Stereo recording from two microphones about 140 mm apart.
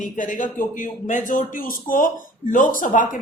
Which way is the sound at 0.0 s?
70° left (ahead or behind).